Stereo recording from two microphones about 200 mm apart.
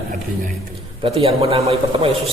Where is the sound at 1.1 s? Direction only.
30° right (ahead or behind).